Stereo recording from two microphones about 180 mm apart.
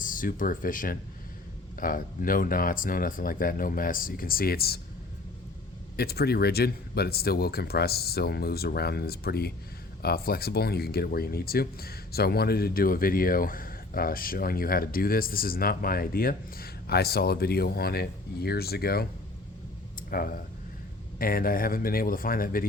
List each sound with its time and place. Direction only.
0.0 s speech: 50° left (ahead or behind)
6.0 s speech: 60° left (ahead or behind)
20.1 s speech: 50° left (ahead or behind)